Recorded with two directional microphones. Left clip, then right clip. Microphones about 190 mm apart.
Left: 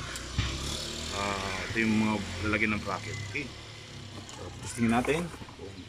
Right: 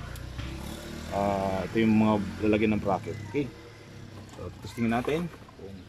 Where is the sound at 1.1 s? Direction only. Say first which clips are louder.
Right 6 dB; 40° right (ahead or behind).